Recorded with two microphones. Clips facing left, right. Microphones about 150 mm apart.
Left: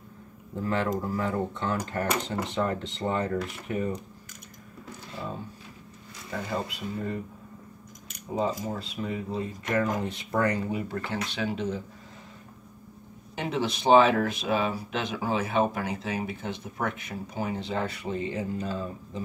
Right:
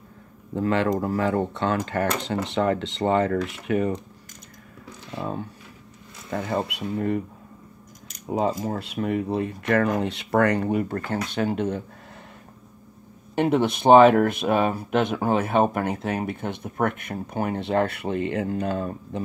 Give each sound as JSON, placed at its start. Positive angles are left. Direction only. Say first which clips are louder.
{"t": 0.6, "sound": "speech", "louder": "right 6 dB", "side_deg": -80}
{"t": 6.3, "sound": "speech", "louder": "right 6 dB", "side_deg": -65}
{"t": 8.4, "sound": "speech", "louder": "right 4 dB", "side_deg": -65}
{"t": 13.3, "sound": "speech", "louder": "right 8 dB", "side_deg": -60}